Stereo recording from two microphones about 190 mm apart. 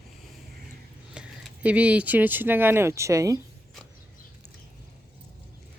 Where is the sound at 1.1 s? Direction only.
5° right (ahead or behind).